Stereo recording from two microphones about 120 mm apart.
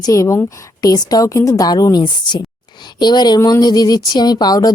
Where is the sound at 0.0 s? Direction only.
25° left (ahead or behind).